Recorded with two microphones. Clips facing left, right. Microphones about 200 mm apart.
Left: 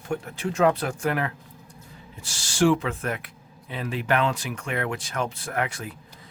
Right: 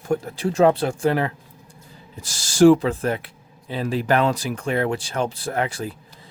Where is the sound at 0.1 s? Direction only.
35° right (ahead or behind).